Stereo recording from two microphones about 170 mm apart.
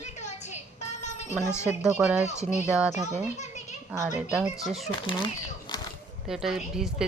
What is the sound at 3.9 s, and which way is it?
Speech, 20° right (ahead or behind).